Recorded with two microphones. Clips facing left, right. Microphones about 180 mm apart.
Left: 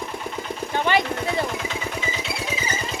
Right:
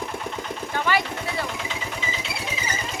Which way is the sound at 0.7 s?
20° left (ahead or behind).